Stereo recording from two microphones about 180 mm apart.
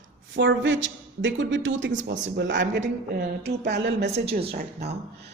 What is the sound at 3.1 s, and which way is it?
Speech, 65° right (ahead or behind).